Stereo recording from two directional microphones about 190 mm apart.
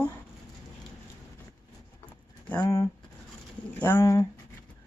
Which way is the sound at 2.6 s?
20° left (ahead or behind).